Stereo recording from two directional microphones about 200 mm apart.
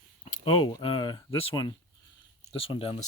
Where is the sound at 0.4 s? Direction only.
25° left (ahead or behind).